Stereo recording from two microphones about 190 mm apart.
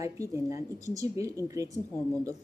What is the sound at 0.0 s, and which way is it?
A woman's voice, 15° right (ahead or behind).